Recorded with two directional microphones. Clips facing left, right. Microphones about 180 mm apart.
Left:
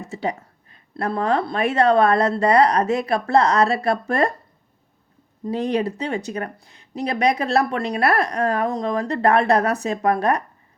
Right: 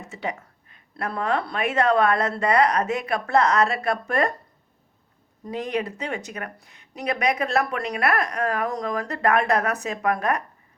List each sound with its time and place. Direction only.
0.1 s speech: 35° left (ahead or behind)
5.5 s speech: 30° left (ahead or behind)